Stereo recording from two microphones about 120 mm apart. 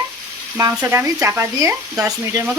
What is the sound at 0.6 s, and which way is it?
Frying, 25° right (ahead or behind).